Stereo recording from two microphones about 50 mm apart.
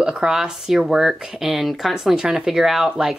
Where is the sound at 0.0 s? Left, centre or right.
Centre.